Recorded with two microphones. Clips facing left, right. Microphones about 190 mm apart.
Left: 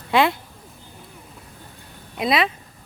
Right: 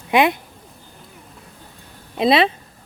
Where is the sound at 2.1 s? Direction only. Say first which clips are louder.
Right 5 dB; 30° right (ahead or behind).